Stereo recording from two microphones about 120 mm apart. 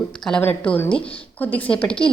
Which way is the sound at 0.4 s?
15° left (ahead or behind).